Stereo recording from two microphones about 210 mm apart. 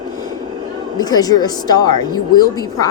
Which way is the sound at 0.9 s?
20° left (ahead or behind).